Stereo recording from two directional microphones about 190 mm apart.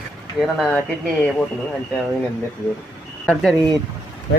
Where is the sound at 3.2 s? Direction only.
5° left (ahead or behind).